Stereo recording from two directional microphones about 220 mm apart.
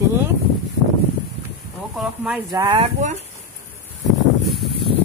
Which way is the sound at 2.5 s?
20° right (ahead or behind).